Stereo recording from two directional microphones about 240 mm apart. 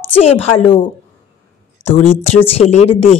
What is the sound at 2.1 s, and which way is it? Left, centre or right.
Speech, left.